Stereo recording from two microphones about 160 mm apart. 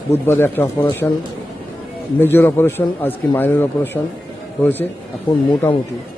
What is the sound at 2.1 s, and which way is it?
A man's voice, 10° left (ahead or behind).